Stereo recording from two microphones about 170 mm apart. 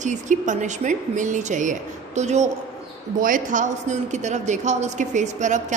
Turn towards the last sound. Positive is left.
turn(degrees=-45)  # may be behind; listen again after turning